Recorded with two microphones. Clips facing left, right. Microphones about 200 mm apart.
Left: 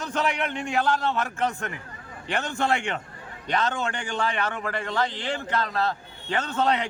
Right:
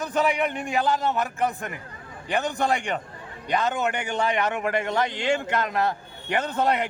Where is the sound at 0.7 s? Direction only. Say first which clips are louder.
Left 1 dB; 15° right (ahead or behind).